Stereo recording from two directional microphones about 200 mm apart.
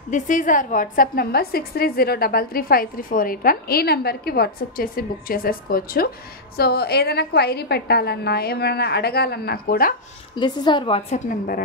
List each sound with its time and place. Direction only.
0.1 s a woman's voice: 40° left (ahead or behind)
10.3 s a woman's voice: 20° left (ahead or behind)
11.2 s a woman's voice: 45° left (ahead or behind)